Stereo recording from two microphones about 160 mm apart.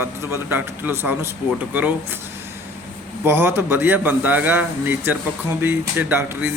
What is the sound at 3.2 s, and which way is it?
Speech, 15° right (ahead or behind).